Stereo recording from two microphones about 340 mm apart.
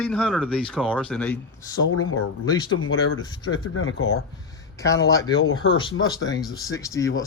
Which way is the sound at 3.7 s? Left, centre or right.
Left.